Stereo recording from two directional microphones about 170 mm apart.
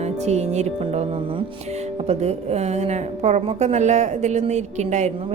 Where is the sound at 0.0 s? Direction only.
40° right (ahead or behind).